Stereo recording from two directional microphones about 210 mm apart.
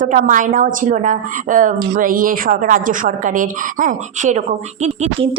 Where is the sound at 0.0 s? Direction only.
40° right (ahead or behind).